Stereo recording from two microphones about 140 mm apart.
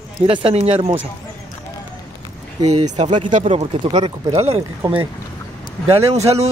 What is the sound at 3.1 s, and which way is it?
Speech, 40° right (ahead or behind).